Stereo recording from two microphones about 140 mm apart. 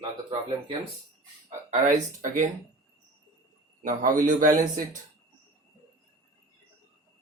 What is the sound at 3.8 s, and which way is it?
A man's voice, 75° right (ahead or behind).